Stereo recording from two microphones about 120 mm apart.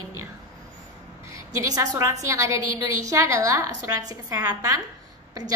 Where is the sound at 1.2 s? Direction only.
25° right (ahead or behind).